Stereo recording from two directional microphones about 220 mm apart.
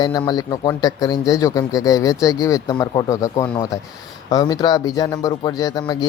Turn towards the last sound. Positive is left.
turn(degrees=20)  # may be behind; listen again after turning